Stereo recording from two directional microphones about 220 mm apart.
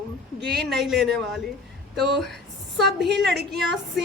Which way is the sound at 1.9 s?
50° right (ahead or behind).